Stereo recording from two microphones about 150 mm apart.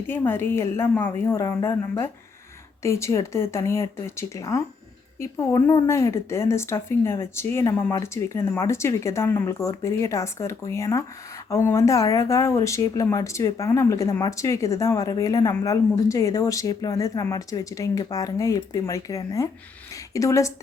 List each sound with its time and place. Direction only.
0.1 s speech: 15° left (ahead or behind)